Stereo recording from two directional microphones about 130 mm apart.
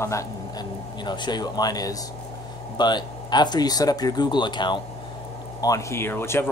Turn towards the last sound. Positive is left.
turn(degrees=20)  # may be behind; listen again after turning